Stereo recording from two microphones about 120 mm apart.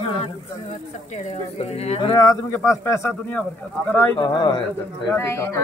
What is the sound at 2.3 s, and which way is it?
Speech, 25° left (ahead or behind).